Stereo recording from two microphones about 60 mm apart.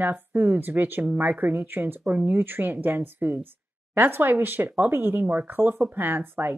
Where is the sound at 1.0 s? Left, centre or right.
Right.